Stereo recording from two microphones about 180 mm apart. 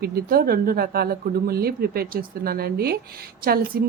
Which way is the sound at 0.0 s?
55° right (ahead or behind).